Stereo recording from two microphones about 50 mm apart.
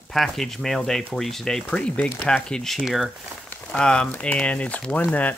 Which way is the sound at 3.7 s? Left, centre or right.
Centre.